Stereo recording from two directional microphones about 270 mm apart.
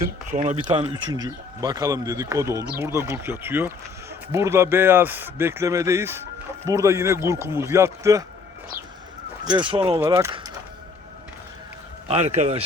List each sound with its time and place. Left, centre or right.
0.3 s speech: right; by 8.2 s centre
9.4 s speech: centre
12.0 s a man's voice: right